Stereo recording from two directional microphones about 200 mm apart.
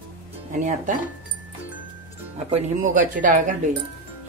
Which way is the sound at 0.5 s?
40° right (ahead or behind).